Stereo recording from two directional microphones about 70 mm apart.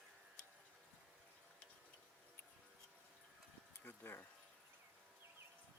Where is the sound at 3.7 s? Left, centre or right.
Left.